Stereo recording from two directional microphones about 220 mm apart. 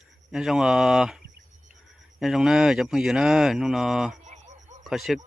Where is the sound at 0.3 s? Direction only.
5° right (ahead or behind).